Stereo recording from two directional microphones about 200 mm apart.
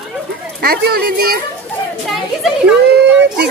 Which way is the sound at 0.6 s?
50° right (ahead or behind).